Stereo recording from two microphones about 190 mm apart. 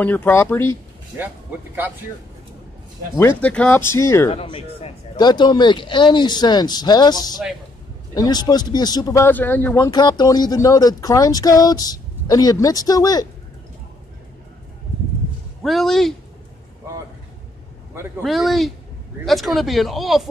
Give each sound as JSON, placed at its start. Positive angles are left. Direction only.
{"t": 0.0, "sound": "speech", "side_deg": 10}
{"t": 3.2, "sound": "speech", "side_deg": 10}
{"t": 4.3, "sound": "speech", "side_deg": 30}
{"t": 15.6, "sound": "speech", "side_deg": 0}
{"t": 18.2, "sound": "speech", "side_deg": 0}